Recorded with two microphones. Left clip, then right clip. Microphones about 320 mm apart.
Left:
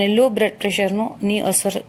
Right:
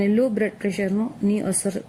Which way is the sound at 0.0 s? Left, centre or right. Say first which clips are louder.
Left 5 dB; left.